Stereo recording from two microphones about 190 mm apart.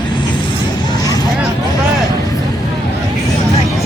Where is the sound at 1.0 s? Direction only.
20° left (ahead or behind).